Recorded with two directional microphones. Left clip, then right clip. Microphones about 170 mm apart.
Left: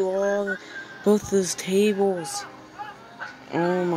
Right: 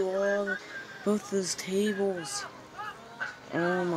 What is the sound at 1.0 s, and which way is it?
Speech, 25° left (ahead or behind).